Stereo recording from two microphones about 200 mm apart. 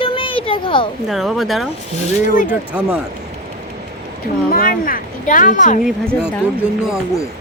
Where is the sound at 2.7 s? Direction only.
5° right (ahead or behind).